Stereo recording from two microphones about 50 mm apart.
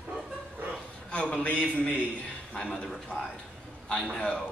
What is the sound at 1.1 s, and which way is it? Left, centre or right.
A man's voice, left.